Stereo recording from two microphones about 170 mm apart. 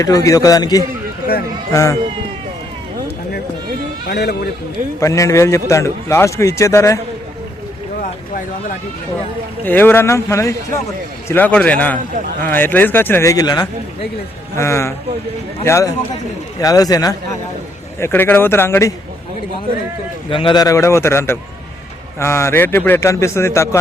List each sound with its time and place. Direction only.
0.0 s a man's voice: 20° left (ahead or behind)
4.0 s speech: 75° left (ahead or behind)
4.9 s a man's voice: 20° left (ahead or behind)
9.6 s a man's voice: 10° left (ahead or behind)
20.3 s a man's voice: 30° left (ahead or behind)